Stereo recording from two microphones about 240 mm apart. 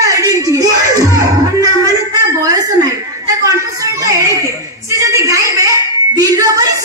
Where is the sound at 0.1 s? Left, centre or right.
Centre.